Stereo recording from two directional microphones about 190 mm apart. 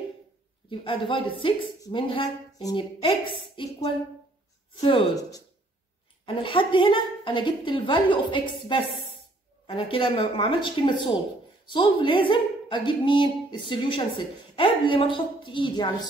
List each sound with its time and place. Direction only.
0.7 s speech: 25° left (ahead or behind)